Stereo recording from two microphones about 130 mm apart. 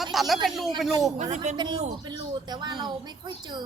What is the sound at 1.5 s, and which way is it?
Speech, 60° right (ahead or behind).